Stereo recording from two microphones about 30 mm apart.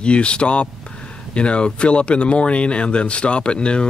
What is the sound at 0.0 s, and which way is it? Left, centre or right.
Speech, left.